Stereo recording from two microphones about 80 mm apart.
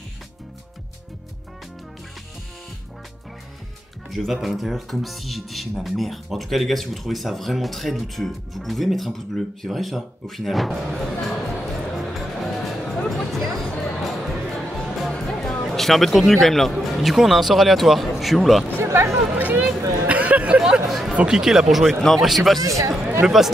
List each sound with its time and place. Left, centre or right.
4.1 s speech: centre
12.1 s music: centre
14.0 s a sound: centre
15.0 s music: centre
16.7 s speech: centre
18.8 s a sound: right
20.1 s hubbub: centre
21.1 s speech: centre
22.6 s speech: right
23.2 s speech: centre